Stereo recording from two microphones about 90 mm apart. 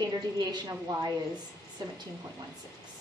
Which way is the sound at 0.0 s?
50° right (ahead or behind).